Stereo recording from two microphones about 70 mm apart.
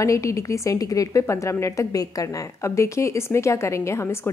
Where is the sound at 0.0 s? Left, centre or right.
Left.